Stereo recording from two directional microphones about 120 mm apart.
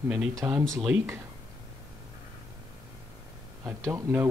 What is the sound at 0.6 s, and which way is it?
Speech, 5° left (ahead or behind).